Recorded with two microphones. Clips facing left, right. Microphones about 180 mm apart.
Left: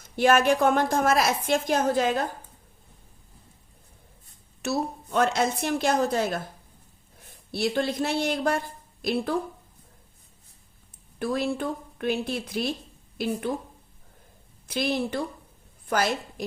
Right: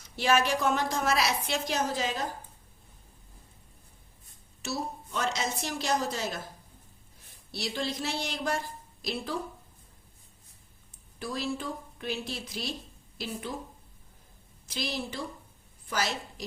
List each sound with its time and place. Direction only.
0.0 s a woman's voice: 50° left (ahead or behind)
4.6 s speech: 60° left (ahead or behind)
7.5 s speech: 55° left (ahead or behind)
11.2 s speech: 60° left (ahead or behind)
14.7 s speech: 55° left (ahead or behind)